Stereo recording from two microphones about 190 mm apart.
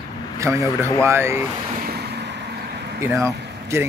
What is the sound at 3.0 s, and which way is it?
Speech, 15° right (ahead or behind).